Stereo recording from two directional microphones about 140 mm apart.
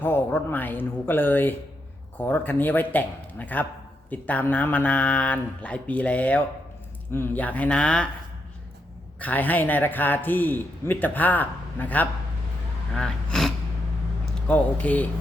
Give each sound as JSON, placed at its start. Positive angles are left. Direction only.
{"t": 0.0, "sound": "a man's voice", "side_deg": 15}
{"t": 9.1, "sound": "a man's voice", "side_deg": 10}